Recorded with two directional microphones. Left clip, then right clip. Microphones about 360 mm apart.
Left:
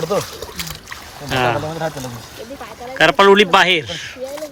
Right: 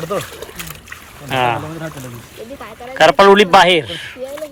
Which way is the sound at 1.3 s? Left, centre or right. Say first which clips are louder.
Right 1 dB; centre.